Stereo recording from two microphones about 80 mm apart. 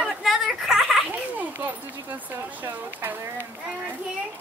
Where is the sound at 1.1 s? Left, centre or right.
Right.